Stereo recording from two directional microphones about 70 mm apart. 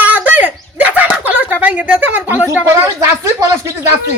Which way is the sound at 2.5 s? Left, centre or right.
Right.